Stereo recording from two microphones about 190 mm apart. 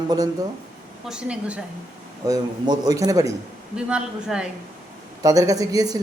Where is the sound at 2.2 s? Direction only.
20° right (ahead or behind).